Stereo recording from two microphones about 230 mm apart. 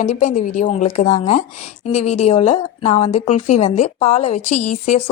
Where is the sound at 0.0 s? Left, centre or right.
Left.